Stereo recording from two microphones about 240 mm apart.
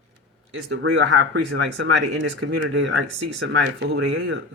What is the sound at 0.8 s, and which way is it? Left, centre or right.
Speech, right.